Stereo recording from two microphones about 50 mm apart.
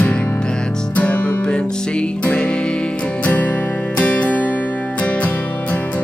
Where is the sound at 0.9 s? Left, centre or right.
Left.